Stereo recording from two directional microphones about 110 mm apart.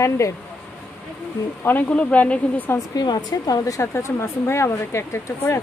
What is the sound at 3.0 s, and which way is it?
Speech, 35° left (ahead or behind).